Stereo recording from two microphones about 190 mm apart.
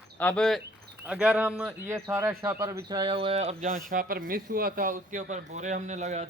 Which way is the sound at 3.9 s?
50° right (ahead or behind).